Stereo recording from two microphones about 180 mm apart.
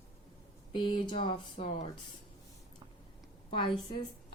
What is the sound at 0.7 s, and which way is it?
Speech, 25° left (ahead or behind).